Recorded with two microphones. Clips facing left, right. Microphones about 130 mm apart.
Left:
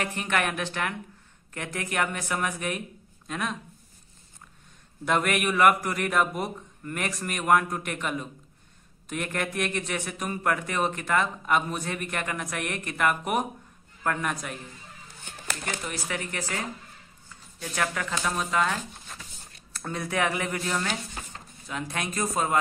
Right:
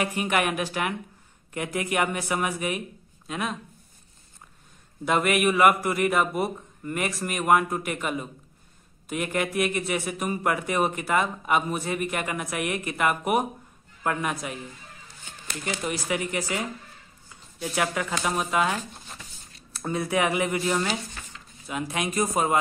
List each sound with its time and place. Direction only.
0.0 s speech: 10° right (ahead or behind)
5.0 s a man's voice: 5° right (ahead or behind)
15.8 s speech: 10° right (ahead or behind)
21.3 s a sound: 45° left (ahead or behind)
21.6 s speech: 10° right (ahead or behind)